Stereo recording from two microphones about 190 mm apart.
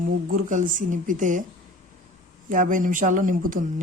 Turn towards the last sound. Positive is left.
turn(degrees=-45)  # may be behind; listen again after turning